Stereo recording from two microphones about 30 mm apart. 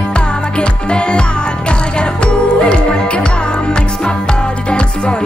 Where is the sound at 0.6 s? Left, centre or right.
Left.